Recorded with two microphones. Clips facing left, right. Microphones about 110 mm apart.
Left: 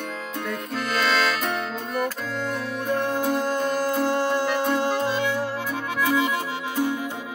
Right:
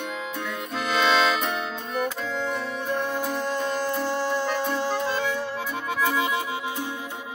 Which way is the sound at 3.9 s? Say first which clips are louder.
Left 3 dB; 45° left (ahead or behind).